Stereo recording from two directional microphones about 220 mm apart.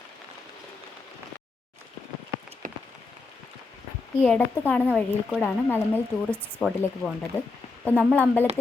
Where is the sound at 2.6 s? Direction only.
35° right (ahead or behind).